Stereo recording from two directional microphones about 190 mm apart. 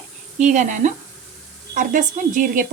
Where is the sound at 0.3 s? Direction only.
40° right (ahead or behind).